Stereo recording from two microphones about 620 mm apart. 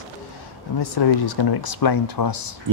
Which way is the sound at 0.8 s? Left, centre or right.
Left.